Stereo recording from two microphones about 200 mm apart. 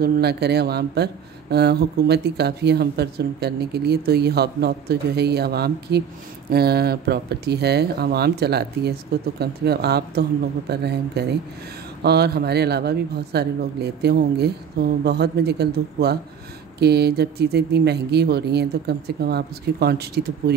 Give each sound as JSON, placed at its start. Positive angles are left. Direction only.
{"t": 0.0, "sound": "speech", "side_deg": -55}